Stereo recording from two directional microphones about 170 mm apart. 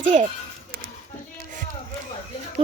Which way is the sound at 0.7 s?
60° right (ahead or behind).